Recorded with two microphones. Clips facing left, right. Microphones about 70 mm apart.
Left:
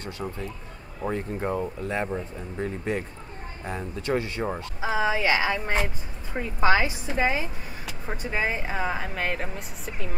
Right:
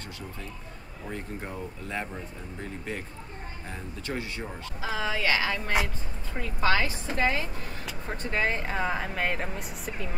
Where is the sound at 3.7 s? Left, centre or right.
Left.